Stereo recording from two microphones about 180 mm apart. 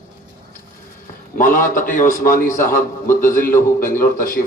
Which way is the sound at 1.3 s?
45° left (ahead or behind).